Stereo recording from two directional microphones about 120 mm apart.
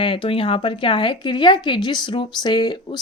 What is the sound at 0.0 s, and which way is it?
A woman's voice, 45° left (ahead or behind).